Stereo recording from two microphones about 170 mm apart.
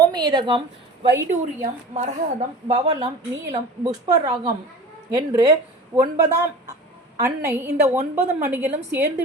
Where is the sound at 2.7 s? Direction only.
35° right (ahead or behind).